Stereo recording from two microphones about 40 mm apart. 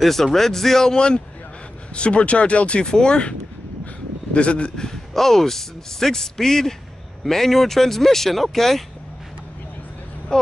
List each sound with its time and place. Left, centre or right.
0.0 s a man's voice: centre
0.9 s speech: left
5.1 s a man's voice: centre
10.3 s a man's voice: centre